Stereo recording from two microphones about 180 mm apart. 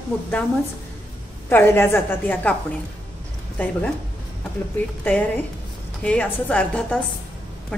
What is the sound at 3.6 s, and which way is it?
Speech, 10° left (ahead or behind).